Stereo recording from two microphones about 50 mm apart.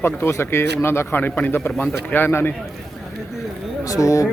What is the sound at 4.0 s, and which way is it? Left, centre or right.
Speech, left.